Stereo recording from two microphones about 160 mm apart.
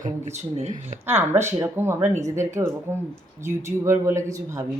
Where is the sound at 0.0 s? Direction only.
45° right (ahead or behind).